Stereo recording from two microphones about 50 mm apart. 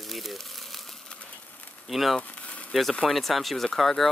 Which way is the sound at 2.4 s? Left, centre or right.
Left.